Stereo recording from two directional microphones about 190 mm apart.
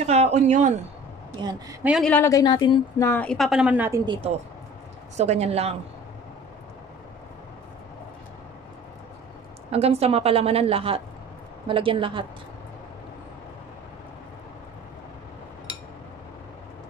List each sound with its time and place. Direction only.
0.0 s speech: 35° right (ahead or behind)
1.4 s a woman's voice: 20° right (ahead or behind)
1.8 s speech: 5° right (ahead or behind)
2.0 s speech: 10° left (ahead or behind)
3.0 s a woman's voice: 10° left (ahead or behind); by 4.0 s 10° right (ahead or behind)
4.0 s a woman's voice: 30° right (ahead or behind)
9.7 s a woman's voice: 35° right (ahead or behind)